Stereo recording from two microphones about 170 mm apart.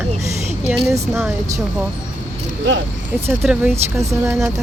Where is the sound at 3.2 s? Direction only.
15° right (ahead or behind).